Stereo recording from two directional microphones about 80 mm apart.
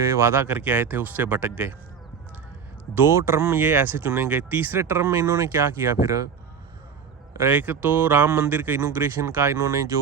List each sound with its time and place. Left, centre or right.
0.1 s speech: right
2.9 s speech: right
7.5 s speech: right